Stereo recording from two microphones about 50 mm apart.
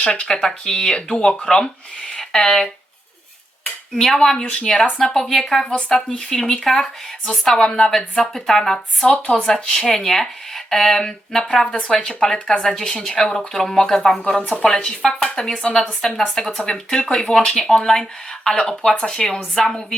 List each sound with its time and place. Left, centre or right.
0.0 s speech: centre
3.9 s speech: centre
5.6 s speech: centre
6.1 s speech: centre
14.3 s speech: left